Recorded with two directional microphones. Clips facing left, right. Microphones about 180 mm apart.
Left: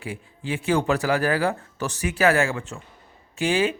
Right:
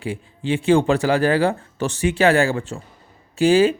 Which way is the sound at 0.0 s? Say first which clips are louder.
Right 6 dB; 30° right (ahead or behind).